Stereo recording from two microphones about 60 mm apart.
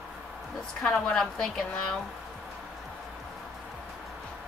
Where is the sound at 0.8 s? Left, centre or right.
Centre.